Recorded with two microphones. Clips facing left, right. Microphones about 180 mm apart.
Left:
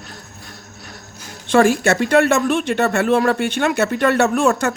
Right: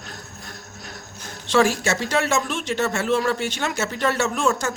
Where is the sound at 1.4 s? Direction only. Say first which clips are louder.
Left 5 dB; 55° left (ahead or behind).